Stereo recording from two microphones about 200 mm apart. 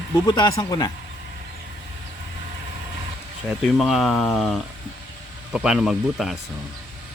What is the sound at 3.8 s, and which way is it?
A man's voice, centre (ahead or behind).